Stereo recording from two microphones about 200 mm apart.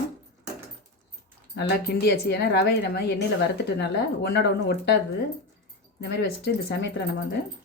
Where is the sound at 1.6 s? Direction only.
55° left (ahead or behind).